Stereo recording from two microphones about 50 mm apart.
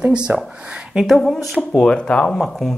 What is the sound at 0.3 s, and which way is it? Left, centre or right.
Speech, right.